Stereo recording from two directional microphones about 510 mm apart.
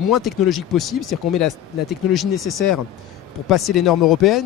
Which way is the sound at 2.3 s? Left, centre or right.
Left.